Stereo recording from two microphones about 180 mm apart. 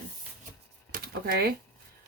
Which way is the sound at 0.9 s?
60° right (ahead or behind).